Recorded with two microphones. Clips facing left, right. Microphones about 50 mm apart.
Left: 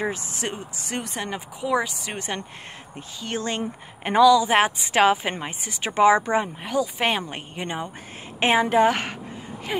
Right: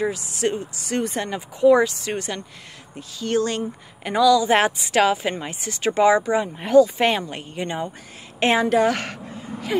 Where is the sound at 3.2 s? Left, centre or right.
Centre.